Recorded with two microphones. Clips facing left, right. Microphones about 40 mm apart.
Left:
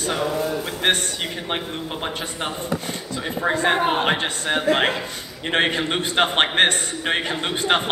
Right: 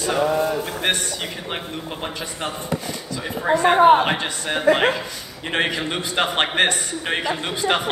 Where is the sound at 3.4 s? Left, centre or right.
Left.